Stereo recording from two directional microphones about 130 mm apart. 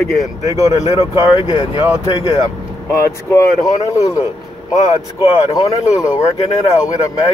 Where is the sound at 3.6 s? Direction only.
25° left (ahead or behind).